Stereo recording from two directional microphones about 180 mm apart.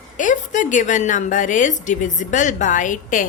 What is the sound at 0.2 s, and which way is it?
A woman's voice, 45° left (ahead or behind).